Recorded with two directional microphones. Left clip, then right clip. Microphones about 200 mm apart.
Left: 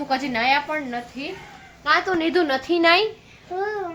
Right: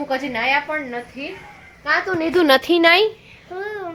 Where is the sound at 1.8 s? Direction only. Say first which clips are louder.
Even; 15° right (ahead or behind).